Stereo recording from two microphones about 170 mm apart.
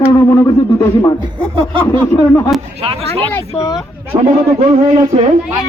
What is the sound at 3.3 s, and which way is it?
Speech, 20° left (ahead or behind).